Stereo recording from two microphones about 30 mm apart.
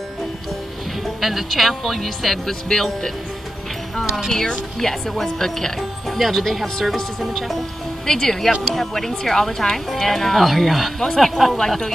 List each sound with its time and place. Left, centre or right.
1.2 s speech: centre
4.3 s speech: left
4.7 s speech: centre
5.8 s music: centre
6.4 s speech: centre